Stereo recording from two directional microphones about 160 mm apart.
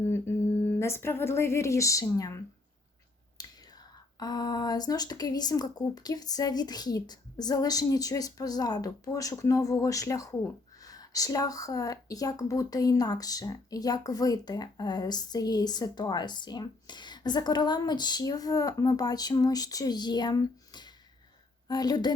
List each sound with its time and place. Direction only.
0.0 s humming: 15° left (ahead or behind)
0.8 s speech: 15° left (ahead or behind)
3.4 s whispering: 25° left (ahead or behind)
4.2 s speech: 25° left (ahead or behind)